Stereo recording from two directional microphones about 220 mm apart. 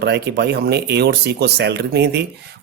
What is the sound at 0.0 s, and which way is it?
Speech, 50° right (ahead or behind).